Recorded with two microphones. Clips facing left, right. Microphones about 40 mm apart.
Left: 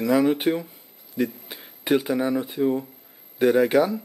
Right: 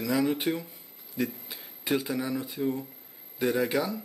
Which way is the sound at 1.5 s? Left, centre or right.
Left.